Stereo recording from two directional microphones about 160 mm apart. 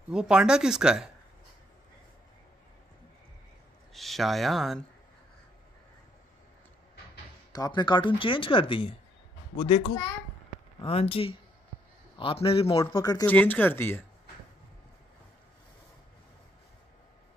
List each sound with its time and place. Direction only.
0.1 s speech: 5° right (ahead or behind)
3.9 s speech: centre (ahead or behind)
7.5 s speech: 25° left (ahead or behind)
10.8 s speech: 35° left (ahead or behind)
12.8 s a man's voice: 20° left (ahead or behind)
13.3 s speech: 10° left (ahead or behind)